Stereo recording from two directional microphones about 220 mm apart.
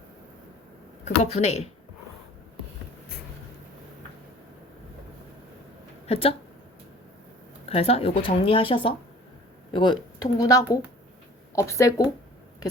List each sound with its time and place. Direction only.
1.0 s speech: 30° left (ahead or behind)
6.1 s speech: 25° left (ahead or behind)
7.7 s speech: 25° left (ahead or behind)